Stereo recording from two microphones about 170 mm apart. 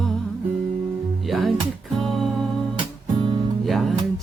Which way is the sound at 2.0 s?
Centre (ahead or behind).